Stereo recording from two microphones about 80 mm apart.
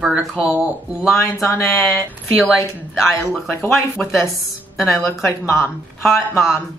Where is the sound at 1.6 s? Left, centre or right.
Left.